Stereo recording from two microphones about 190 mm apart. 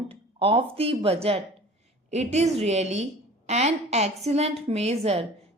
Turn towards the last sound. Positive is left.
turn(degrees=-35)  # may be behind; listen again after turning